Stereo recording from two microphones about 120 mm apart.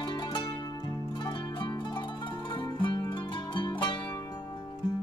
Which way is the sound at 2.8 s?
40° left (ahead or behind).